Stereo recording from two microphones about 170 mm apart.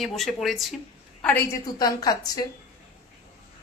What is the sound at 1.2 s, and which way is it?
A woman's voice, 10° left (ahead or behind).